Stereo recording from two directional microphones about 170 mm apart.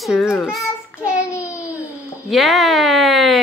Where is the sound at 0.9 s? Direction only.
15° left (ahead or behind).